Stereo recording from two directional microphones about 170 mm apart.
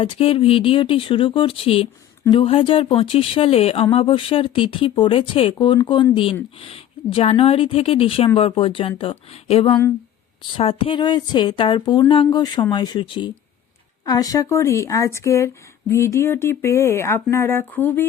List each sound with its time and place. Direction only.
0.0 s speech: 35° left (ahead or behind); by 18.0 s 10° left (ahead or behind)